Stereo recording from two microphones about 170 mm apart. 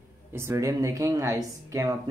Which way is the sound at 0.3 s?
15° right (ahead or behind).